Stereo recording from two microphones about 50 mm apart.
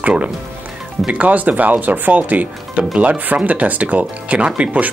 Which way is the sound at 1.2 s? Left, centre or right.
Right.